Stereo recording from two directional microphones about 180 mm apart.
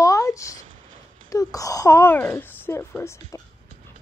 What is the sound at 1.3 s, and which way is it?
Speech, 20° left (ahead or behind).